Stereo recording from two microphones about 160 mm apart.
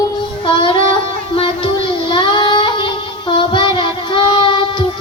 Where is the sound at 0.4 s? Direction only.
30° left (ahead or behind).